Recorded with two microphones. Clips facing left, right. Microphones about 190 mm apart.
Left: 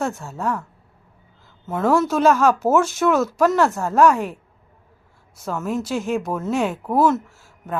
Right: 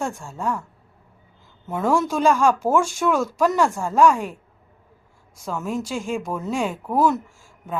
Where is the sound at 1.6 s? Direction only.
Centre (ahead or behind).